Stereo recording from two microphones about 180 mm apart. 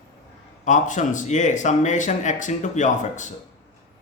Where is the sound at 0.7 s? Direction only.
45° left (ahead or behind).